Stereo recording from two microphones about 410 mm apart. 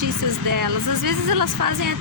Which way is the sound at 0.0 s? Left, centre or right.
Right.